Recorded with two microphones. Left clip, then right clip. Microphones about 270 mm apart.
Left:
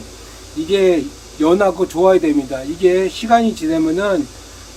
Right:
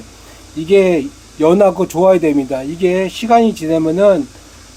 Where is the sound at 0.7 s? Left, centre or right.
Right.